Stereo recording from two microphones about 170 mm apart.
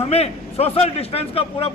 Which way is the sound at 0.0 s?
35° left (ahead or behind).